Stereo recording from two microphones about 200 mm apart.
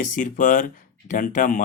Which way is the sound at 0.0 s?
40° left (ahead or behind).